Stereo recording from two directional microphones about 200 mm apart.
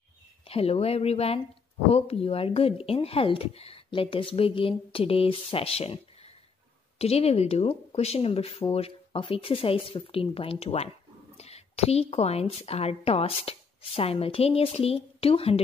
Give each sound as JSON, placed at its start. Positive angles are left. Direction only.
{"t": 0.5, "sound": "speech", "side_deg": 30}